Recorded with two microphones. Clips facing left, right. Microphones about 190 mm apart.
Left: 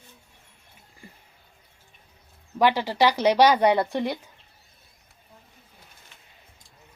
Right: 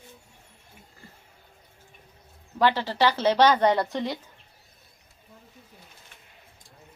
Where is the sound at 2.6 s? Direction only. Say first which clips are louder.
Left 2 dB; 15° left (ahead or behind).